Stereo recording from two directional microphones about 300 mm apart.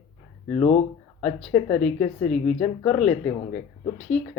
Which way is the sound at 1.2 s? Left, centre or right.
Centre.